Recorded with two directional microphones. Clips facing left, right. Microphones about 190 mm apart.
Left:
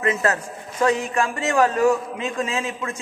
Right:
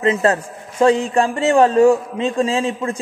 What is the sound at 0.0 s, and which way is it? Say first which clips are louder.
A man's voice: right 5 dB; 30° right (ahead or behind).